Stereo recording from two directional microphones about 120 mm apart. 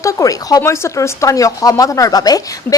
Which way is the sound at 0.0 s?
30° left (ahead or behind).